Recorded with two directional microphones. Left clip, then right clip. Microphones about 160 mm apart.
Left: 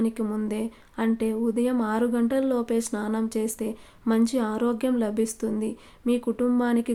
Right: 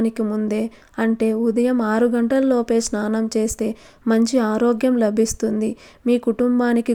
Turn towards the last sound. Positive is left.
turn(degrees=-35)  # may be behind; listen again after turning